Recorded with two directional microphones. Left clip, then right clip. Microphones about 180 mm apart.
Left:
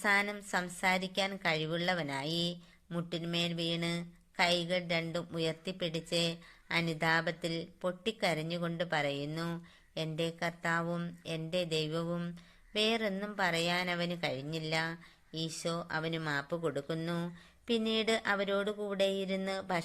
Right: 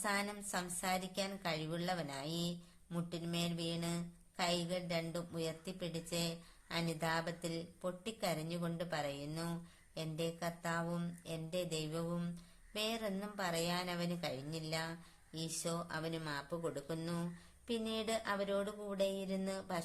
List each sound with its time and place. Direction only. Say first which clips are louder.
0.0 s a woman's voice: left 8 dB; 25° left (ahead or behind)